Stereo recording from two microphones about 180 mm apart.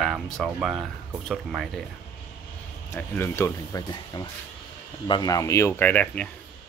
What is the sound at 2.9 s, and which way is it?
Speech, 15° left (ahead or behind).